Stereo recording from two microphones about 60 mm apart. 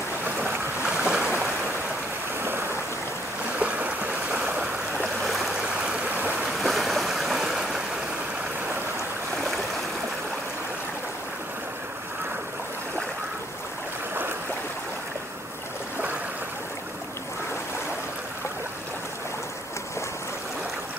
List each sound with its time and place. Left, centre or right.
0.4 s boat: centre
3.5 s stream: right
5.2 s stream: centre
5.6 s stream: centre
6.6 s waves: centre